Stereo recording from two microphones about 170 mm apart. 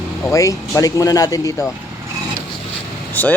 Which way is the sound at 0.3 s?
20° left (ahead or behind).